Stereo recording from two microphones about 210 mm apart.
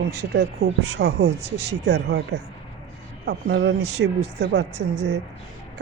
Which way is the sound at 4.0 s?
50° right (ahead or behind).